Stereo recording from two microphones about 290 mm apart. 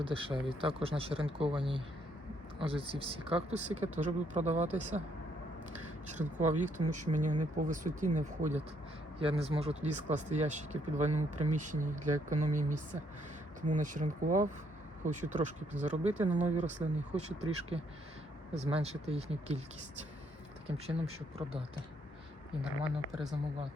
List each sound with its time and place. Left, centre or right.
0.0 s speech: centre
6.1 s speech: right
20.7 s speech: right